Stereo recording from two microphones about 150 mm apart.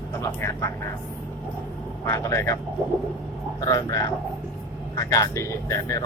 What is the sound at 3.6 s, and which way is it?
Speech, 20° left (ahead or behind).